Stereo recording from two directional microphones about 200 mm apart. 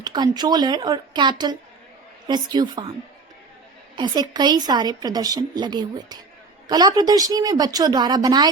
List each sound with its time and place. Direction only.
0.0 s a woman's voice: 20° right (ahead or behind)
3.9 s a woman's voice: 20° right (ahead or behind)